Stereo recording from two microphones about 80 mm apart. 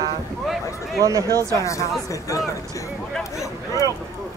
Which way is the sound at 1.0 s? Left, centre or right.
Right.